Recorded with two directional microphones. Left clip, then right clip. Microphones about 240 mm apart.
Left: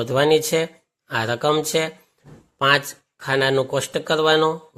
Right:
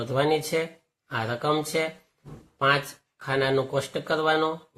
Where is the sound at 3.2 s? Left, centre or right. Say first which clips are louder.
Left 5 dB; left.